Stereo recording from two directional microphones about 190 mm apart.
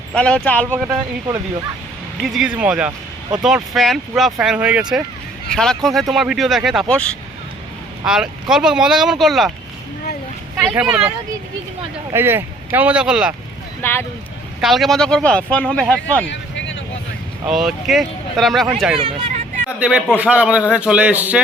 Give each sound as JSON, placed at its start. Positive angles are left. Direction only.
{"t": 0.1, "sound": "speech", "side_deg": 5}
{"t": 0.7, "sound": "a man's voice", "side_deg": -15}
{"t": 2.2, "sound": "speech", "side_deg": 0}
{"t": 10.6, "sound": "speech", "side_deg": -5}
{"t": 12.1, "sound": "a man's voice", "side_deg": -10}
{"t": 14.6, "sound": "speech", "side_deg": 0}
{"t": 16.3, "sound": "vehicle", "side_deg": 75}
{"t": 17.4, "sound": "speech", "side_deg": 0}
{"t": 18.9, "sound": "speech", "side_deg": -30}
{"t": 19.8, "sound": "a man's voice", "side_deg": -5}